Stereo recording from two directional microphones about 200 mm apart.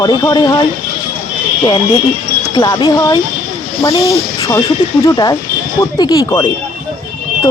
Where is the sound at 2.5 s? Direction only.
20° left (ahead or behind).